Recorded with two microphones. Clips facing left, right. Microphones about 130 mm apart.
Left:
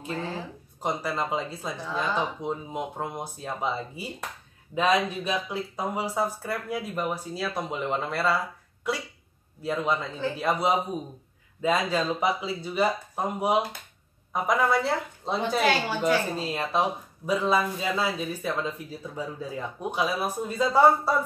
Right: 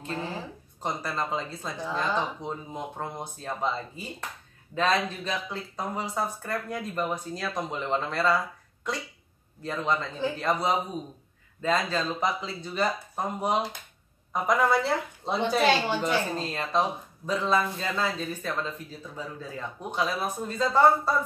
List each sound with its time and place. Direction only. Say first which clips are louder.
0.8 s a woman's voice: left 2 dB; 10° left (ahead or behind)